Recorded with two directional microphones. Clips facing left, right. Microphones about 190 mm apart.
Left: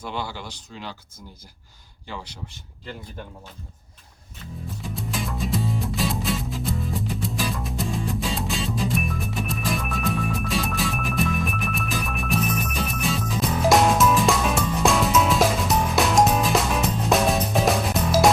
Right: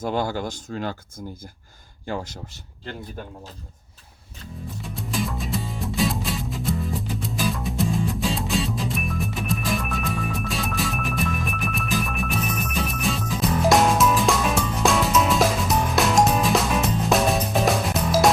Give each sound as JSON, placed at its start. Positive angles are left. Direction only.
{"t": 0.0, "sound": "speech", "side_deg": -45}
{"t": 4.8, "sound": "music", "side_deg": 0}